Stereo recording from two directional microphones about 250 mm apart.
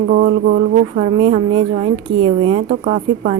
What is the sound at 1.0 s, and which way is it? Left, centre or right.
A woman's voice, right.